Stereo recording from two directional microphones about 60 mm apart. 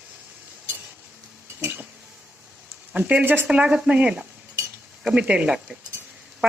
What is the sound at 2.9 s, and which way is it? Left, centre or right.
Speech, right.